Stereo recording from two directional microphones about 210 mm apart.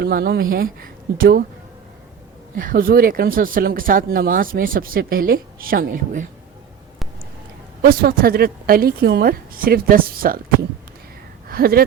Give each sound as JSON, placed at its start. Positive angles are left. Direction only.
{"t": 0.0, "sound": "speech", "side_deg": -45}
{"t": 2.6, "sound": "speech", "side_deg": -45}
{"t": 7.8, "sound": "speech", "side_deg": -45}
{"t": 11.4, "sound": "speech", "side_deg": -45}